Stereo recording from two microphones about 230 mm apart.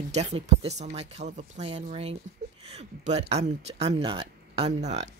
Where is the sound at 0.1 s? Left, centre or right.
Right.